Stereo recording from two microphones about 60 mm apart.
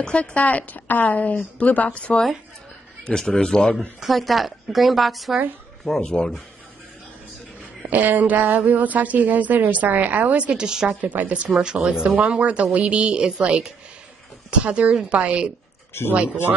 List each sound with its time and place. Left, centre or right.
0.0 s a woman's voice: centre
4.0 s a woman's voice: centre
5.9 s speech: centre
7.9 s a woman's voice: right; by 11.0 s centre
11.0 s a woman's voice: right
11.6 s a woman's voice: centre